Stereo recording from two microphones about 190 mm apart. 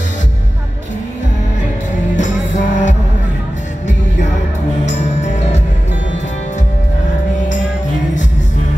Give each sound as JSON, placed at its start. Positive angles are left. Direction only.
{"t": 2.1, "sound": "music", "side_deg": 40}